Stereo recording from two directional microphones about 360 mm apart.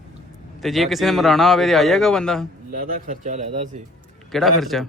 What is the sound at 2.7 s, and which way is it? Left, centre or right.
A man's voice, right.